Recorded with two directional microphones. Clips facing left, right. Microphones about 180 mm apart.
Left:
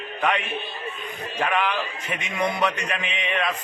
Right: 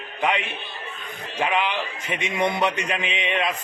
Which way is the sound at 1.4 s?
20° right (ahead or behind).